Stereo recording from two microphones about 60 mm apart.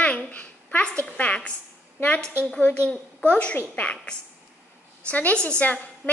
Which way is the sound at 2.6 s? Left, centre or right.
Left.